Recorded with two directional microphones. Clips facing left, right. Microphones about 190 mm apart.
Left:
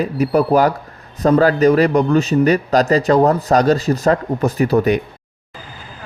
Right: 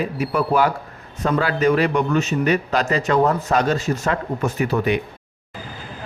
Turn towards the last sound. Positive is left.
turn(degrees=40)  # may be behind; listen again after turning